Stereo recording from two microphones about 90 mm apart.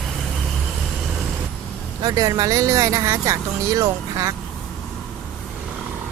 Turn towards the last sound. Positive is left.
turn(degrees=-40)  # may be behind; listen again after turning